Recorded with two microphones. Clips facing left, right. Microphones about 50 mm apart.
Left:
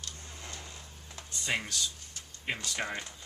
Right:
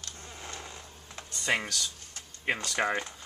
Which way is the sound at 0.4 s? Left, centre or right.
Right.